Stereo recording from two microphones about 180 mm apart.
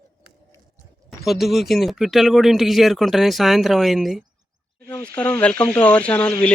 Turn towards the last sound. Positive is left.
turn(degrees=5)  # may be behind; listen again after turning